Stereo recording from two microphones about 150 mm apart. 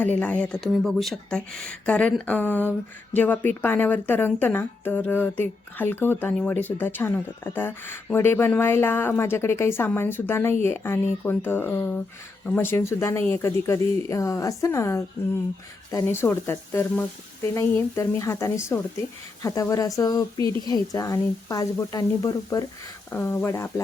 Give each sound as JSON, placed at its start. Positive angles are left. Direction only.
{"t": 0.0, "sound": "a woman's voice", "side_deg": 10}
{"t": 23.1, "sound": "a woman's voice", "side_deg": 15}